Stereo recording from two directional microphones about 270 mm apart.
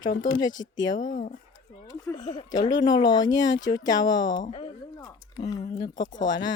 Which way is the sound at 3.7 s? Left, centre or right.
Centre.